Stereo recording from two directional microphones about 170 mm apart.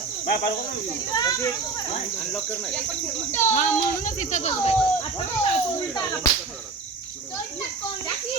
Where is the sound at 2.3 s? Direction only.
15° left (ahead or behind).